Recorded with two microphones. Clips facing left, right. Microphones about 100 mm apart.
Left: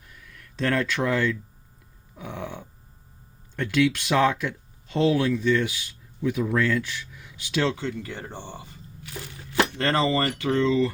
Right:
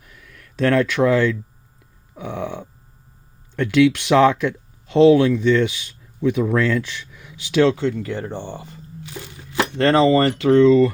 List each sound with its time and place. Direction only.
0.5 s speech: 70° right (ahead or behind)
2.1 s a sound: 80° right
3.5 s speech: 70° right (ahead or behind)
9.0 s a sound: 20° right (ahead or behind)
9.7 s speech: 80° right
10.5 s speech: 60° right (ahead or behind)